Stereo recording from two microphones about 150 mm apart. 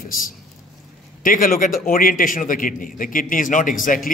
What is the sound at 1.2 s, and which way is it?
A man's voice, 70° left (ahead or behind).